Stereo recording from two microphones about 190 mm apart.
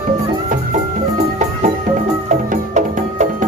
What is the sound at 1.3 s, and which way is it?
Music, 40° right (ahead or behind).